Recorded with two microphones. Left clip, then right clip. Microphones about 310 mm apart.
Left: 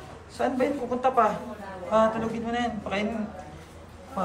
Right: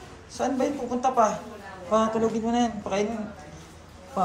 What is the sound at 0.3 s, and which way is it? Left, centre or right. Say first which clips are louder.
Speech: even; centre.